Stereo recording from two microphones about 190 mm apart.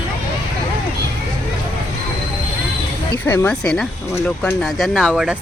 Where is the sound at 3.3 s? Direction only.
5° left (ahead or behind).